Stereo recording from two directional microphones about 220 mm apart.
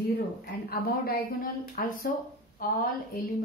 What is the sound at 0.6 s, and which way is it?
A woman's voice, 45° left (ahead or behind).